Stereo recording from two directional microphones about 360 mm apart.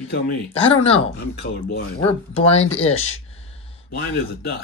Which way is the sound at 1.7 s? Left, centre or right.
Left.